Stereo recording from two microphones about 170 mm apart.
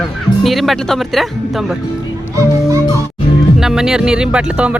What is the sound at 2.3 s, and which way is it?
Speech, 20° right (ahead or behind).